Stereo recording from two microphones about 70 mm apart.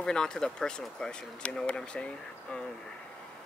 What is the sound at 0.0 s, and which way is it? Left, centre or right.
Speech, centre.